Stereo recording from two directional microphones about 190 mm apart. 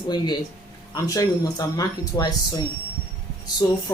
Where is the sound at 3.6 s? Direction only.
15° left (ahead or behind).